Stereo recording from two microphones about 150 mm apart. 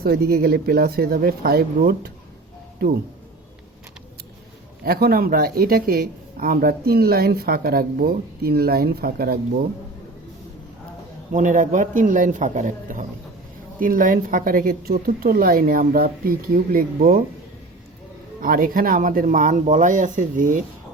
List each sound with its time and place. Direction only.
0.0 s speech: 90° right
4.9 s speech: 90° right
11.3 s a woman's voice: 60° right (ahead or behind)
18.3 s speech: 75° right (ahead or behind)